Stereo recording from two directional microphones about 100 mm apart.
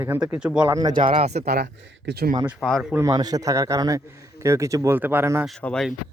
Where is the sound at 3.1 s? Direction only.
40° right (ahead or behind).